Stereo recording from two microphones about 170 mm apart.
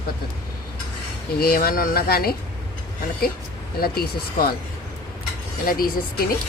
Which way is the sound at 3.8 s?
65° left (ahead or behind).